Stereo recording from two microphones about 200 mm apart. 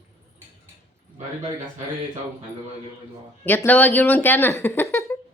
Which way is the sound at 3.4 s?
10° left (ahead or behind).